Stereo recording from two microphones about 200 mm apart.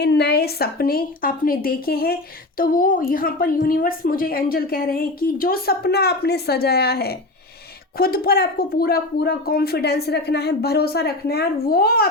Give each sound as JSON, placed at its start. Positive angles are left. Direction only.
{"t": 0.0, "sound": "a woman's voice", "side_deg": 55}